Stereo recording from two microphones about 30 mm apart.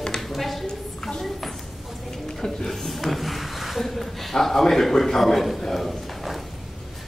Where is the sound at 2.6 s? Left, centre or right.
Centre.